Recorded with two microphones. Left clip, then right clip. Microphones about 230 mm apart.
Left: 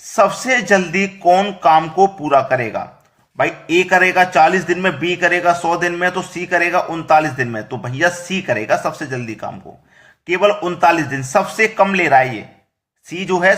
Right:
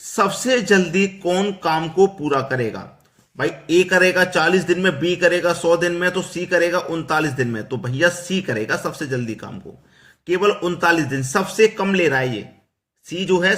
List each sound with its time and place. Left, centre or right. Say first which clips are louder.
0.2 s a man's voice: left 4 dB; centre